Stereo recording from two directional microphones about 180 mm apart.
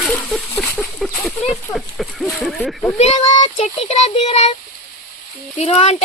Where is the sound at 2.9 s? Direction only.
40° left (ahead or behind).